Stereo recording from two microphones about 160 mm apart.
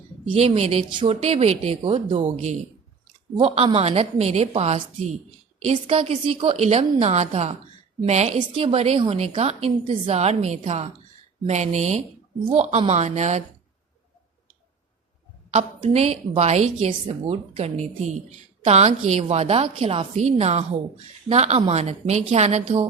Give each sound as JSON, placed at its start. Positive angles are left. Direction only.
{"t": 0.3, "sound": "a woman's voice", "side_deg": -40}
{"t": 15.8, "sound": "a woman's voice", "side_deg": -40}